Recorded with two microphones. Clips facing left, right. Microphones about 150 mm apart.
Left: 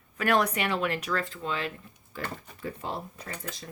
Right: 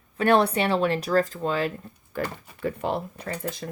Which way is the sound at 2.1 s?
55° right (ahead or behind).